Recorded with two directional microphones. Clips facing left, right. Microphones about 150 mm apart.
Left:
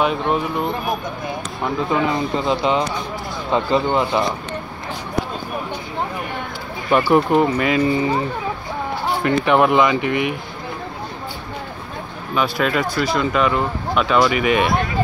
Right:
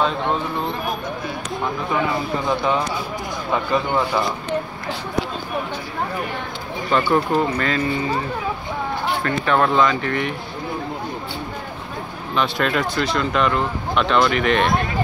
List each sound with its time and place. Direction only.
0.0 s speech: 15° left (ahead or behind)
6.9 s speech: 10° left (ahead or behind)
9.2 s speech: 15° left (ahead or behind)
12.4 s speech: 5° left (ahead or behind)